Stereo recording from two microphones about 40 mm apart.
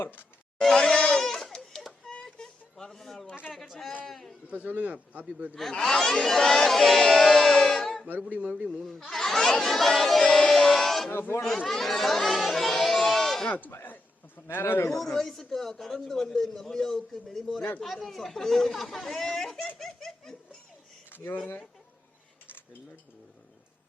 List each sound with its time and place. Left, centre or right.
0.8 s goat: centre
2.7 s a man's voice: centre
4.6 s speech: right
5.7 s a man's voice: centre
6.7 s a sound: centre
8.3 s a man's voice: right
9.0 s speech: centre
9.6 s a sound: centre
11.1 s a man's voice: left
11.4 s a child's voice: centre
13.7 s a man's voice: left
15.2 s a man's voice: centre
19.8 s laughter: centre